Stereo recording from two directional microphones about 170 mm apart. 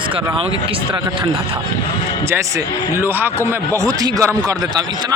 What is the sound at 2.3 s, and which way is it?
A man's voice, 20° right (ahead or behind).